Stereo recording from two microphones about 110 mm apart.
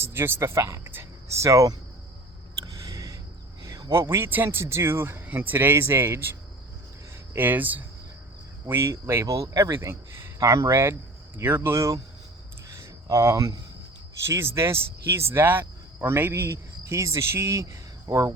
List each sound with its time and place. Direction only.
0.1 s speech: 20° right (ahead or behind)
2.7 s a sound: 30° right (ahead or behind)
4.1 s speech: 20° right (ahead or behind)
7.3 s speech: 15° right (ahead or behind)
12.8 s speech: 25° right (ahead or behind)